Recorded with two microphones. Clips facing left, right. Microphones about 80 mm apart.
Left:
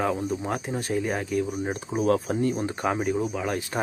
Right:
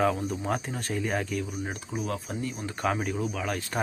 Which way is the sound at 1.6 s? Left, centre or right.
Left.